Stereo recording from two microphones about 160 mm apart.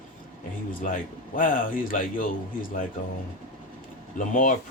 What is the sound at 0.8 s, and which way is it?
Speech, 55° left (ahead or behind).